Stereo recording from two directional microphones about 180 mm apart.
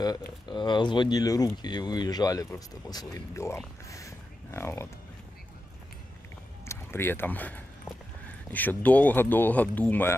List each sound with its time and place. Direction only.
0.0 s speech: 25° left (ahead or behind)
6.6 s speech: 15° left (ahead or behind)